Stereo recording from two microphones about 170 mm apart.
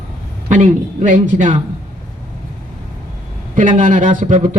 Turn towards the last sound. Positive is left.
turn(degrees=-45)  # may be behind; listen again after turning